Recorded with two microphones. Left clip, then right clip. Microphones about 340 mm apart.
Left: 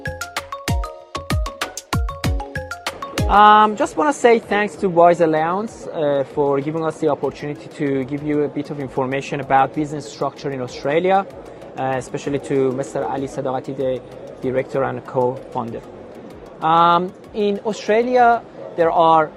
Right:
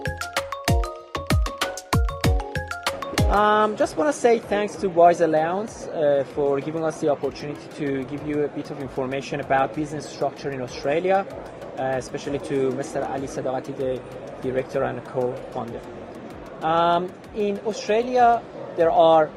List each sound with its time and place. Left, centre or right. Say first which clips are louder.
1.3 s music: right 1 dB; centre
3.2 s speech: left 9 dB; left
16.6 s speech: left 6 dB; left
18.8 s speech: left 2 dB; left